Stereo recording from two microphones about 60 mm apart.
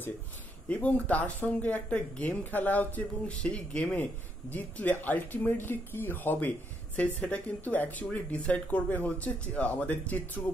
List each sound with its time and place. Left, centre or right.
0.7 s speech: left
7.0 s speech: left